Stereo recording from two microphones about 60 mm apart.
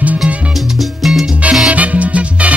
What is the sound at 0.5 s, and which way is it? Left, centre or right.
Music, centre.